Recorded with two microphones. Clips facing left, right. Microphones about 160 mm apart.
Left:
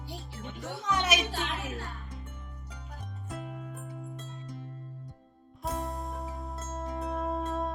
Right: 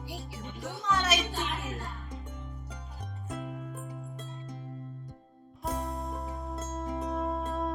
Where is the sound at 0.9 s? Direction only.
15° left (ahead or behind).